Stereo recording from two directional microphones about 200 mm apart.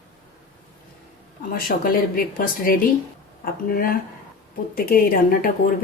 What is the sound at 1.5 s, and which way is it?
Speech, 45° left (ahead or behind).